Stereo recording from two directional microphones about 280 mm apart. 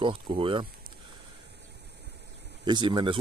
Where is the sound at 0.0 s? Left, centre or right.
Centre.